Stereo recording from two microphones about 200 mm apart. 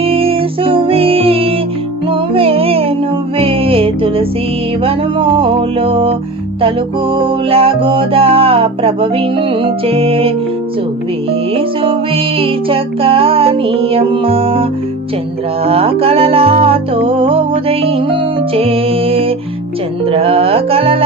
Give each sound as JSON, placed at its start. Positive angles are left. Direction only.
{"t": 0.0, "sound": "music", "side_deg": -30}
{"t": 11.5, "sound": "music", "side_deg": -30}